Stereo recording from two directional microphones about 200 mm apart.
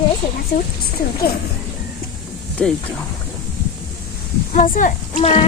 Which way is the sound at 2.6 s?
5° left (ahead or behind).